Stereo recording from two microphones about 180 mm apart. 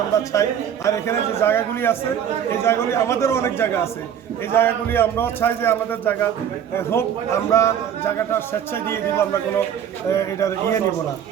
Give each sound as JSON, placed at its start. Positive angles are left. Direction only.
{"t": 0.4, "sound": "a man's voice", "side_deg": 20}